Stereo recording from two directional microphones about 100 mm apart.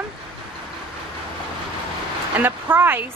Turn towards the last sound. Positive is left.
turn(degrees=-20)  # may be behind; listen again after turning